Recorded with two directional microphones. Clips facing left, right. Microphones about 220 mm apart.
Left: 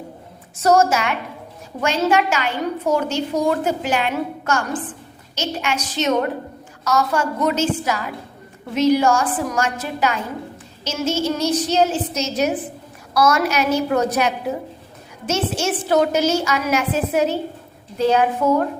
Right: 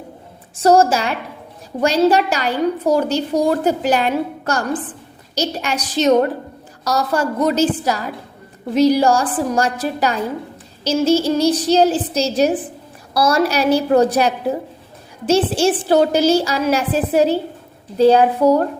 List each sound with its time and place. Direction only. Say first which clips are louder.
0.5 s a woman's voice: right 3 dB; 30° right (ahead or behind)